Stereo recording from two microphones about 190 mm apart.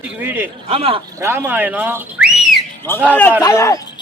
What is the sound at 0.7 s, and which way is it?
Speech, 30° right (ahead or behind).